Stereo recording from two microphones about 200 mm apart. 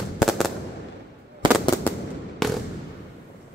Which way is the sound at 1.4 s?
25° right (ahead or behind).